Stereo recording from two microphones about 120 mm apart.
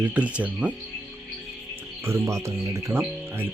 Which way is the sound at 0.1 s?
10° right (ahead or behind).